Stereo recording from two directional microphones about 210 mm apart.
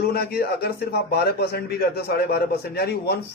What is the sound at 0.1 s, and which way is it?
A man's voice, 50° left (ahead or behind).